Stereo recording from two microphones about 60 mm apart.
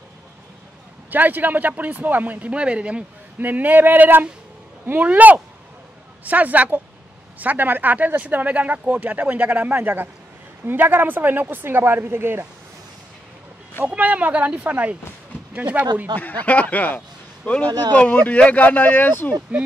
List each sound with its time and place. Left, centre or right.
1.1 s speech: right
3.3 s speech: right
13.8 s speech: right
16.2 s speech: left